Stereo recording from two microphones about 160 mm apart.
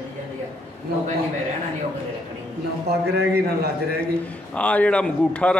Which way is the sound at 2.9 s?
90° right.